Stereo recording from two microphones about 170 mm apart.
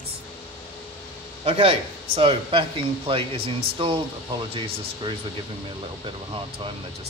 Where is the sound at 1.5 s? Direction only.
35° right (ahead or behind).